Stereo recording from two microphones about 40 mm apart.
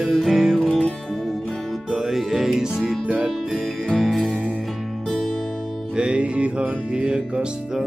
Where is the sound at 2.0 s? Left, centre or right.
Centre.